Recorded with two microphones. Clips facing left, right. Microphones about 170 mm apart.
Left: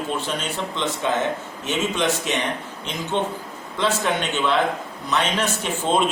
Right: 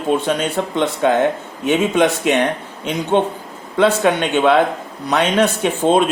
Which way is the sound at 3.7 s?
60° right (ahead or behind).